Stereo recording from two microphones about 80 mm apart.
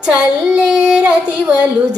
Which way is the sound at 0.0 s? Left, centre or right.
Centre.